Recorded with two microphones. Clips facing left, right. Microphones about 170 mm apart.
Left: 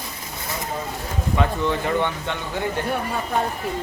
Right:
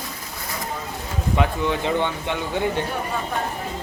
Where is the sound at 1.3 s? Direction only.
15° right (ahead or behind).